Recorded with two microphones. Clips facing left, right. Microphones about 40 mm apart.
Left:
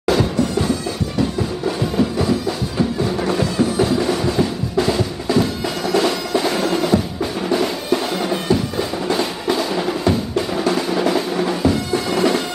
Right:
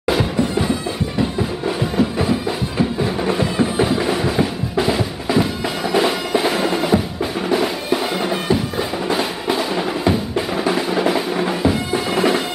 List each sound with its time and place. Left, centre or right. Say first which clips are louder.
0.0 s bagpipes: left 1 dB; centre
1.8 s music: even; centre